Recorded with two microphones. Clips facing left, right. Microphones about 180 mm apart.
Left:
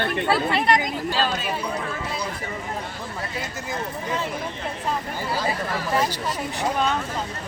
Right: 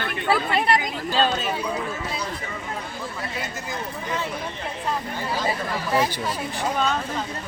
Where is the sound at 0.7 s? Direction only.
30° right (ahead or behind).